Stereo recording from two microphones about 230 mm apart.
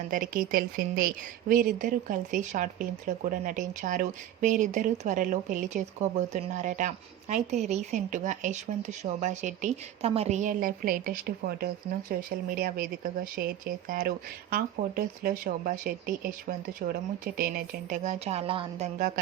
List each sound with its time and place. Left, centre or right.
0.1 s a woman's voice: right